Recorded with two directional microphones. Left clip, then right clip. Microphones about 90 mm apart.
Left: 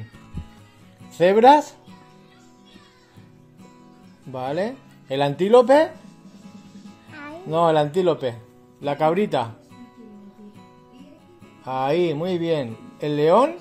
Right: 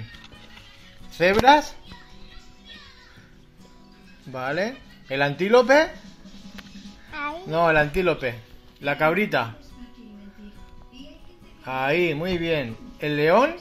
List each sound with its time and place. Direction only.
1.1 s speech: 70° left (ahead or behind)
4.3 s speech: 55° left (ahead or behind); by 5.3 s 75° left (ahead or behind)
5.4 s speech: 85° left
7.5 s speech: 55° left (ahead or behind)
11.6 s speech: 55° left (ahead or behind)